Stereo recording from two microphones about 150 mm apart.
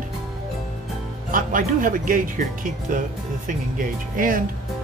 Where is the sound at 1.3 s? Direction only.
65° right (ahead or behind).